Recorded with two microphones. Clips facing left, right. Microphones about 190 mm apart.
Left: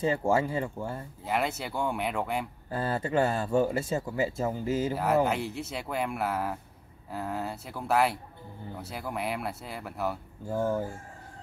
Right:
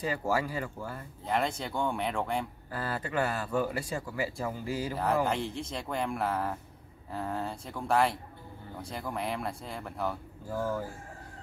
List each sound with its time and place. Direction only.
0.0 s speech: 25° left (ahead or behind)
1.2 s speech: 5° left (ahead or behind)
2.7 s speech: 25° left (ahead or behind)
4.9 s speech: 5° left (ahead or behind)
10.5 s speech: 25° left (ahead or behind)